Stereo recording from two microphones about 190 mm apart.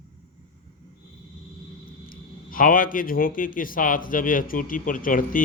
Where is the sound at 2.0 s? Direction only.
45° left (ahead or behind).